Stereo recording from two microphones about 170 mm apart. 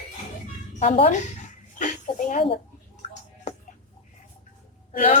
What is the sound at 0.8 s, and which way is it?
Speech, 35° left (ahead or behind).